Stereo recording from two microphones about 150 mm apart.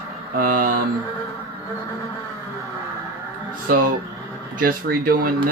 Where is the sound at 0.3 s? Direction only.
70° right (ahead or behind).